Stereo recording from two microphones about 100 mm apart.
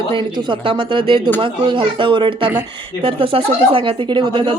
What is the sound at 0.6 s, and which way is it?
Speech, 55° right (ahead or behind).